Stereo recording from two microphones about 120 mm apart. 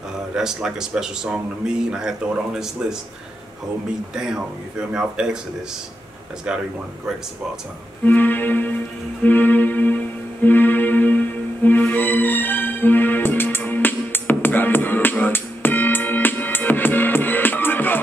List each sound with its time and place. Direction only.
0.4 s speech: 5° right (ahead or behind)
4.1 s speech: 5° right (ahead or behind)
8.0 s music: 15° left (ahead or behind)